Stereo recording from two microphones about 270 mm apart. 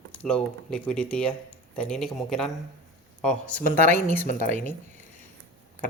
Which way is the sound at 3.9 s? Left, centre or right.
Right.